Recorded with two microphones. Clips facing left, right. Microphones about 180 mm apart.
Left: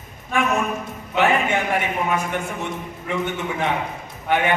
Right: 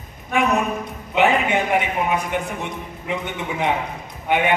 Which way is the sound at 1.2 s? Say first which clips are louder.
Right 1 dB; 15° right (ahead or behind).